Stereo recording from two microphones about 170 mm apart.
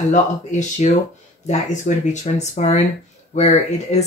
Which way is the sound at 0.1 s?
45° left (ahead or behind).